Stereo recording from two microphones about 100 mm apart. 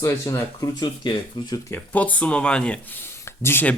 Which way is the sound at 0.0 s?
30° left (ahead or behind).